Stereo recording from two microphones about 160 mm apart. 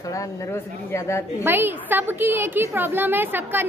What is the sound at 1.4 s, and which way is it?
A woman's voice, 15° right (ahead or behind).